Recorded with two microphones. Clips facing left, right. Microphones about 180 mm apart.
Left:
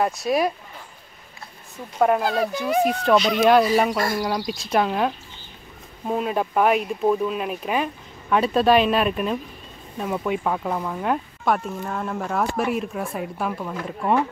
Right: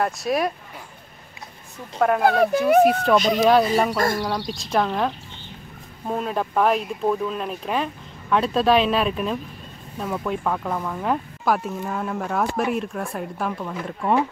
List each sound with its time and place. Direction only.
0.0 s speech: centre (ahead or behind)
2.0 s speech: 5° left (ahead or behind)
2.2 s speech: 60° right (ahead or behind)
3.2 s speech: 45° right (ahead or behind)
3.7 s speech: 5° left (ahead or behind)